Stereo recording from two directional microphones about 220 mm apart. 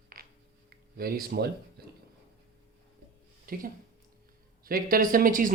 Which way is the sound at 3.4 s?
40° right (ahead or behind).